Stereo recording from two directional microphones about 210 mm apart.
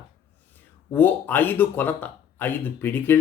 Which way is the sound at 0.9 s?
10° left (ahead or behind).